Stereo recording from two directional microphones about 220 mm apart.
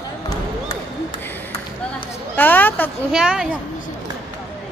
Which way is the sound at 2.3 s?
10° left (ahead or behind).